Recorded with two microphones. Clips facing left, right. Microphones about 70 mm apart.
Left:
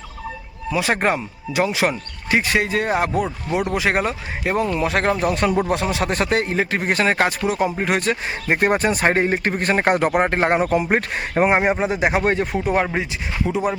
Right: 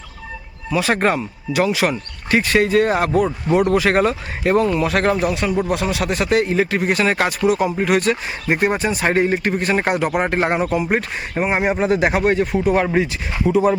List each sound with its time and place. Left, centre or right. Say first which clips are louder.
0.7 s speech: right 2 dB; centre
5.3 s speech: left 1 dB; left
5.6 s speech: right 1 dB; left
8.5 s speech: left 1 dB; left
11.7 s speech: right 2 dB; centre
12.2 s speech: right 3 dB; left
13.5 s speech: right 7 dB; centre